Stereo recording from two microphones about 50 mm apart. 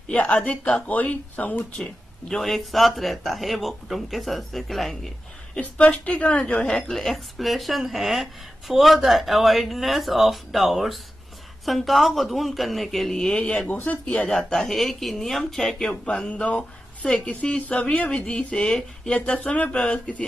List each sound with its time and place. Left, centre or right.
0.1 s a woman's voice: left
1.8 s speech: centre
5.6 s a woman's voice: left
6.9 s a woman's voice: centre; by 14.3 s left
14.3 s speech: centre
16.1 s a woman's voice: centre